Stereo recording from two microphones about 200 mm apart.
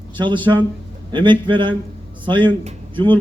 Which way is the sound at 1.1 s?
25° right (ahead or behind).